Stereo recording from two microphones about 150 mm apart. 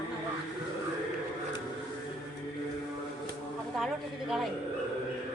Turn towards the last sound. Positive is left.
turn(degrees=0)  # may be behind; listen again after turning